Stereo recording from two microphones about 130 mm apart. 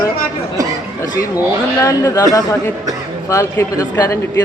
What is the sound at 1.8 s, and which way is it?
Speech, 25° left (ahead or behind).